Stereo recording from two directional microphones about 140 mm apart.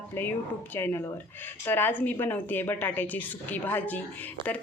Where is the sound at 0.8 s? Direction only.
15° left (ahead or behind).